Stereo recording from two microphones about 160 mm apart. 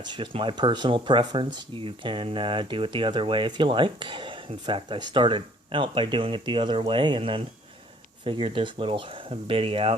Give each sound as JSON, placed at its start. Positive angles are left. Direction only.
{"t": 0.0, "sound": "speech", "side_deg": -30}